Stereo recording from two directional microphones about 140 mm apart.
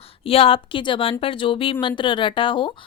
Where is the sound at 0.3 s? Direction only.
40° left (ahead or behind).